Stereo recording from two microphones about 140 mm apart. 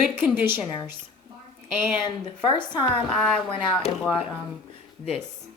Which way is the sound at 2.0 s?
35° left (ahead or behind).